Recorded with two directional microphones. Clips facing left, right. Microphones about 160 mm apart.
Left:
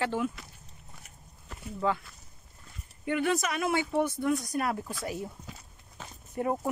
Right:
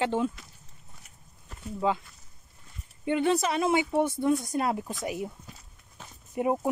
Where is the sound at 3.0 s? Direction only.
25° right (ahead or behind).